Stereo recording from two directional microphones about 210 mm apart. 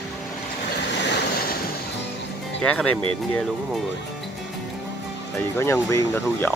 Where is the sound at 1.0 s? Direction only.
50° left (ahead or behind).